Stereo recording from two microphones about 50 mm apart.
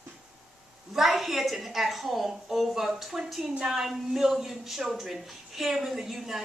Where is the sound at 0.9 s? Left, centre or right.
Centre.